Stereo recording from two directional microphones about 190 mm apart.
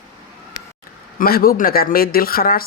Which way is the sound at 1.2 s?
50° left (ahead or behind).